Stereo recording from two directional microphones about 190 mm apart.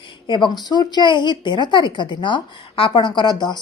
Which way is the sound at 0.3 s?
25° left (ahead or behind).